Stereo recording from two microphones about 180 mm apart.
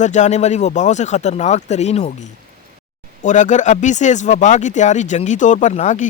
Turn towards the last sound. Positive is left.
turn(degrees=40)  # may be behind; listen again after turning